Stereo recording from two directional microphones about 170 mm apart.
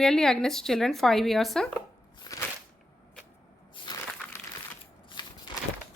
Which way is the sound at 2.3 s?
20° left (ahead or behind).